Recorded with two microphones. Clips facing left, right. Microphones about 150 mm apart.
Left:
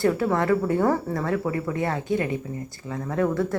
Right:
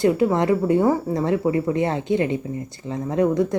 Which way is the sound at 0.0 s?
20° right (ahead or behind).